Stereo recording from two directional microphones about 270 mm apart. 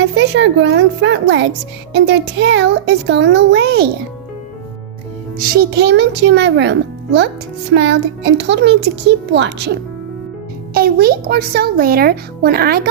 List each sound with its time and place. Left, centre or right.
0.2 s a child's voice: right
5.4 s a child's voice: right
10.8 s a child's voice: right